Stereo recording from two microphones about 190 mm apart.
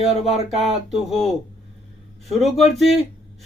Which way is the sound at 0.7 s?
Centre (ahead or behind).